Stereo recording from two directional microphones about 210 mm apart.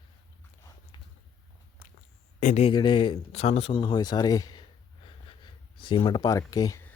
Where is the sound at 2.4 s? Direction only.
35° left (ahead or behind).